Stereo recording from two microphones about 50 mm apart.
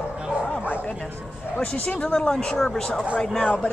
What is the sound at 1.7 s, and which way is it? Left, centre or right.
Speech, left.